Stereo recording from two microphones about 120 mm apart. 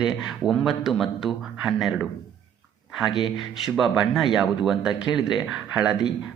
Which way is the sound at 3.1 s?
40° left (ahead or behind).